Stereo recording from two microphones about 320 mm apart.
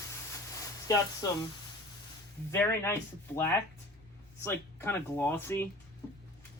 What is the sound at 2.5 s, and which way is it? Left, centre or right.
Speech, centre.